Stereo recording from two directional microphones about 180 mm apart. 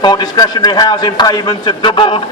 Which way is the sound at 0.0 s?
25° left (ahead or behind).